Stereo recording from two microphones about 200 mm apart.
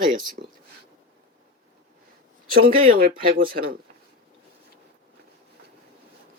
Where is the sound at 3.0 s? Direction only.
45° right (ahead or behind).